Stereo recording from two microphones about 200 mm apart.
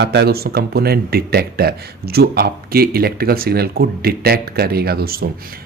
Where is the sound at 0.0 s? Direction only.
60° right (ahead or behind).